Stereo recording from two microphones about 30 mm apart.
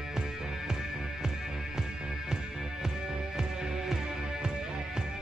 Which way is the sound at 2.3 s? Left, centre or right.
Centre.